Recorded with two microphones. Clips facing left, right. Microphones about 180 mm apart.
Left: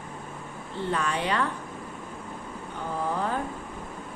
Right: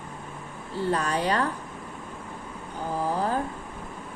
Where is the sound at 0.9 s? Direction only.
40° right (ahead or behind).